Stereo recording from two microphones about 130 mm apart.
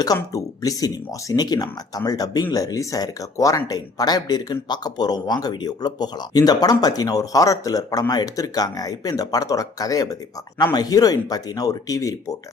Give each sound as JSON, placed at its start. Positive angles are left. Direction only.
{"t": 0.0, "sound": "speech", "side_deg": 30}